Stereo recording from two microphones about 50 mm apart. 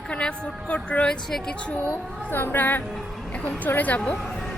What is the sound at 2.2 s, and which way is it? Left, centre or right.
Speech, left.